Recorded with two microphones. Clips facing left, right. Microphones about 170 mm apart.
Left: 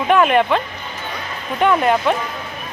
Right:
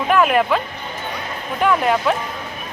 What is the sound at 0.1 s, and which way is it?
Speech, centre (ahead or behind).